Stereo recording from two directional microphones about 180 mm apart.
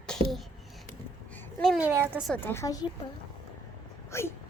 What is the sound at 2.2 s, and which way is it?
Speech, 10° left (ahead or behind).